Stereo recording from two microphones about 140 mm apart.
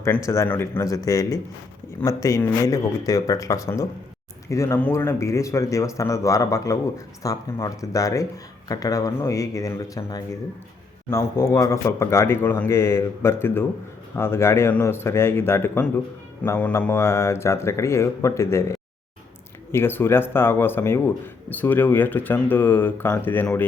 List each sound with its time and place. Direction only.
0.0 s speech: 20° left (ahead or behind)
19.7 s speech: 15° left (ahead or behind)